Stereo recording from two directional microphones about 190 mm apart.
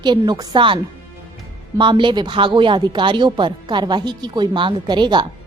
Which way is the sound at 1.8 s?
25° right (ahead or behind).